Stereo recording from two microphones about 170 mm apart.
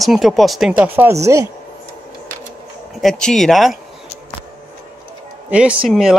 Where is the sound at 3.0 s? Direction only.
Centre (ahead or behind).